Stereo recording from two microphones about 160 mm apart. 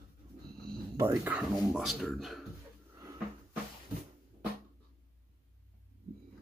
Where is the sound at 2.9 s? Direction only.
20° right (ahead or behind).